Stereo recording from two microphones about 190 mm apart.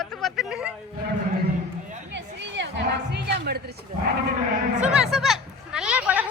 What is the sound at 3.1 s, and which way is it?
Music, 60° right (ahead or behind).